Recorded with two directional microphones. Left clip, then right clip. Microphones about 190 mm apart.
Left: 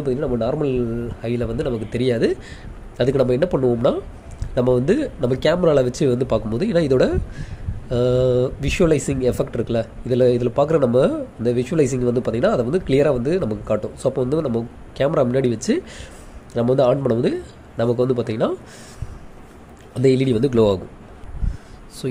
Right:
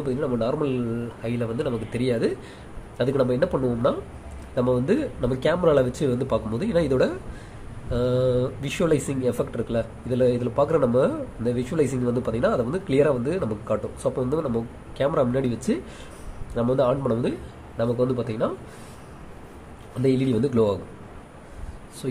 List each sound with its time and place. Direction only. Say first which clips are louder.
0.0 s a man's voice: left 4 dB; 20° left (ahead or behind)
20.0 s a man's voice: left 6 dB; 30° left (ahead or behind)
22.0 s speech: left 4 dB; 30° left (ahead or behind)